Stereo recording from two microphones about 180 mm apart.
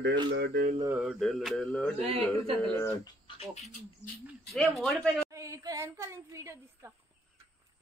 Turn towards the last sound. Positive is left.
turn(degrees=-15)  # may be behind; listen again after turning